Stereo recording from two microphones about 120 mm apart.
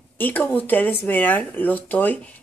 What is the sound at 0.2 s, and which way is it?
Speech, 15° left (ahead or behind).